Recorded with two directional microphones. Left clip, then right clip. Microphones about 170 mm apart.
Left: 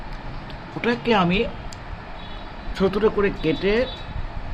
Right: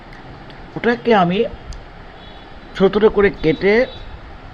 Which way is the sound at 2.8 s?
30° right (ahead or behind).